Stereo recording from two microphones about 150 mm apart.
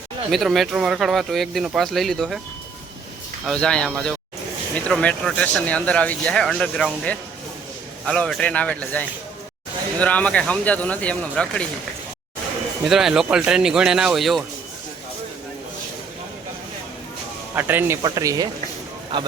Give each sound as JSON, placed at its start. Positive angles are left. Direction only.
{"t": 0.3, "sound": "speech", "side_deg": 0}
{"t": 3.4, "sound": "speech", "side_deg": 5}
{"t": 12.8, "sound": "speech", "side_deg": 0}
{"t": 17.5, "sound": "speech", "side_deg": -15}